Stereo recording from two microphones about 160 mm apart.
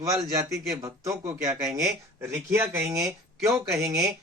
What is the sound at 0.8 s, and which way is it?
Speech, 20° right (ahead or behind).